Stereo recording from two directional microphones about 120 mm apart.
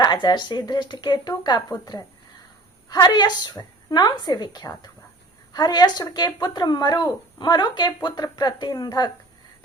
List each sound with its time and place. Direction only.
0.0 s speech: 35° left (ahead or behind)